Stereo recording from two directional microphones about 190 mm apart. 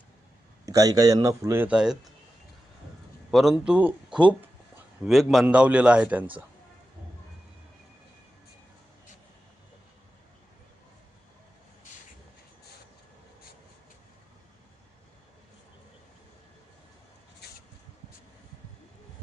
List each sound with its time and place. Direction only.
0.6 s speech: 20° right (ahead or behind)
3.3 s a man's voice: centre (ahead or behind)